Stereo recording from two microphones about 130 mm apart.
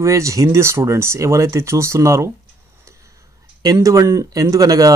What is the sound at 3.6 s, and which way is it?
Speech, 25° right (ahead or behind).